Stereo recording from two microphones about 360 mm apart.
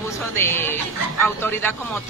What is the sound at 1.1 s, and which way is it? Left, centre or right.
Speech, centre.